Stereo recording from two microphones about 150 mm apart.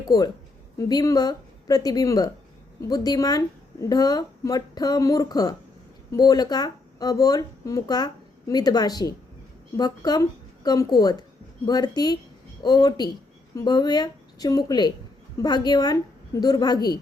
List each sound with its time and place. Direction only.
0.1 s a woman's voice: 25° left (ahead or behind)